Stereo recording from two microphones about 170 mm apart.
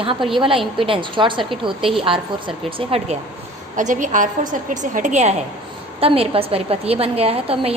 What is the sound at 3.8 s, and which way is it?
A woman's voice, 45° right (ahead or behind).